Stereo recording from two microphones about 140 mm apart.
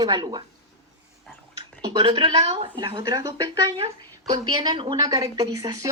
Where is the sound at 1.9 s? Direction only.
35° right (ahead or behind).